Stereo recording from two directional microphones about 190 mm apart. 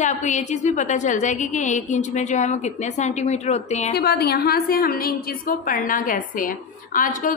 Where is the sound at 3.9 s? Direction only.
55° left (ahead or behind).